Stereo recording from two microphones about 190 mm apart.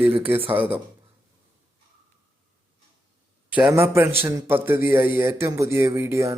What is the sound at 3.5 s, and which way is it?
A man's voice, 10° right (ahead or behind).